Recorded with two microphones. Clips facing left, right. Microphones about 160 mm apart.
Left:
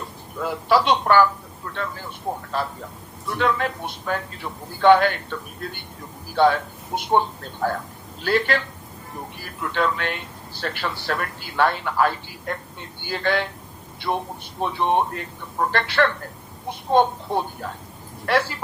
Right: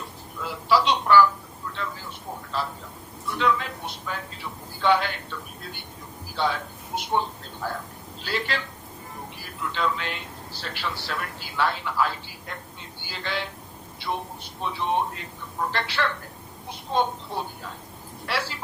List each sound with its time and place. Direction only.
0.3 s a man's voice: 55° left (ahead or behind)
6.3 s speech: 55° left (ahead or behind)
8.2 s a man's voice: 55° left (ahead or behind)